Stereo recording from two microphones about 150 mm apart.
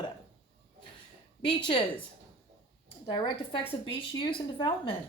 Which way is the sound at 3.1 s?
30° left (ahead or behind).